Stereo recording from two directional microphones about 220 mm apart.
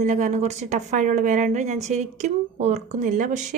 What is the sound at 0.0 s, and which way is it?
Speech, 35° right (ahead or behind).